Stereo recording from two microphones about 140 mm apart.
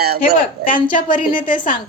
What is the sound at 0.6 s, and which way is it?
Speech, 80° left.